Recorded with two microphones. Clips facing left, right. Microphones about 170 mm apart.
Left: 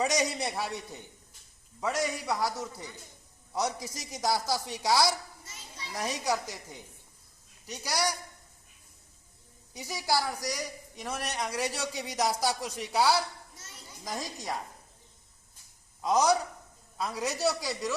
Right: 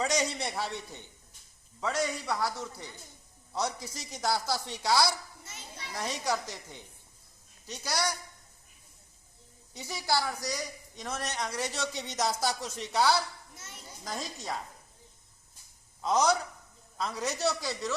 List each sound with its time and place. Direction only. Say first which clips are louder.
0.0 s a woman's voice: left 1 dB; 15° left (ahead or behind)
9.7 s a woman's voice: left 1 dB; 15° left (ahead or behind)
16.0 s a man's voice: left 1 dB; 10° left (ahead or behind)